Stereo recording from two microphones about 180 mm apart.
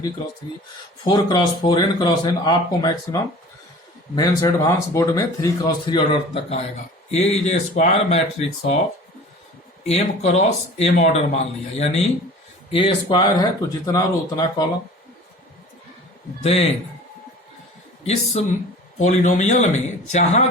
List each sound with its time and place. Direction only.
1.0 s speech: 25° left (ahead or behind)
9.8 s speech: 35° left (ahead or behind); by 14.7 s 20° left (ahead or behind)
16.4 s speech: 35° left (ahead or behind)
18.0 s speech: 35° left (ahead or behind)